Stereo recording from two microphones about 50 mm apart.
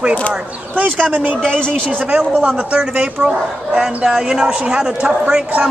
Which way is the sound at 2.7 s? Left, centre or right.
Right.